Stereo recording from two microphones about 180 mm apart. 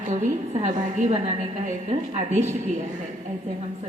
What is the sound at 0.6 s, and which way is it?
A woman's voice, 45° right (ahead or behind).